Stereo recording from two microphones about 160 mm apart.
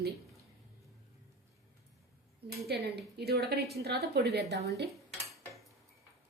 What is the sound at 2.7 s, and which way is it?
A woman's voice, 85° right.